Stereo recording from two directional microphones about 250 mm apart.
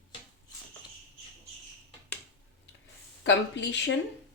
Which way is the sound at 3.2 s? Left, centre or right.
Left.